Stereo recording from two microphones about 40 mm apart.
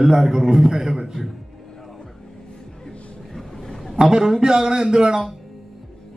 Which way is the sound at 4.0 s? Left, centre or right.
Centre.